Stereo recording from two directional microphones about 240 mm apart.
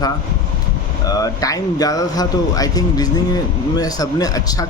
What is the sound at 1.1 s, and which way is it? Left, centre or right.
Speech, centre.